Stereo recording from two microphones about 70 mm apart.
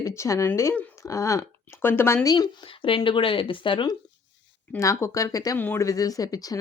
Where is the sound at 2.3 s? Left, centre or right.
Left.